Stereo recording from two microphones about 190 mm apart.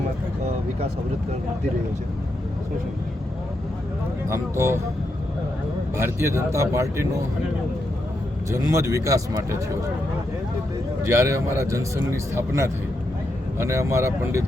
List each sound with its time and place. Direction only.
4.3 s speech: 15° right (ahead or behind)
6.0 s speech: 15° right (ahead or behind)
8.7 s speech: 15° right (ahead or behind)
11.0 s speech: 15° right (ahead or behind)